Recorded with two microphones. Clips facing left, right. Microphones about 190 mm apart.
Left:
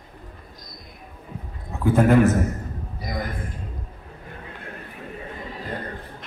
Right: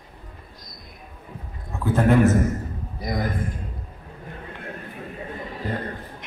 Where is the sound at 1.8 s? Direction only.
5° left (ahead or behind).